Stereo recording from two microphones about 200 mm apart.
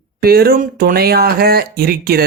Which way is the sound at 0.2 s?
50° right (ahead or behind).